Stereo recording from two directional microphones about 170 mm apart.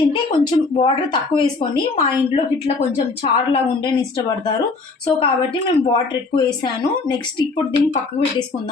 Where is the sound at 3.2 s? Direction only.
30° left (ahead or behind).